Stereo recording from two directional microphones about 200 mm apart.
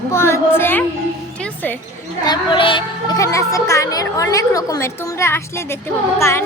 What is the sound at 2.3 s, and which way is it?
A woman's voice, 25° left (ahead or behind).